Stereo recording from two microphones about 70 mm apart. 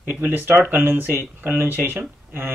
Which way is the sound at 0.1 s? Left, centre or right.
Right.